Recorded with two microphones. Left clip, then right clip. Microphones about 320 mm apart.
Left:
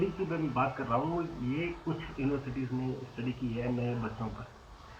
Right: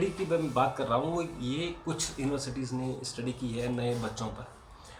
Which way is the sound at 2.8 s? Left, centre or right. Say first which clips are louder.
Right 2 dB; centre.